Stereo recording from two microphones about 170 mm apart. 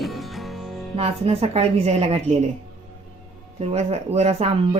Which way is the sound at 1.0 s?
35° right (ahead or behind).